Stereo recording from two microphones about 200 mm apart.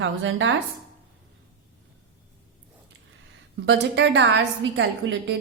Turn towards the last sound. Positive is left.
turn(degrees=-65)  # may be behind; listen again after turning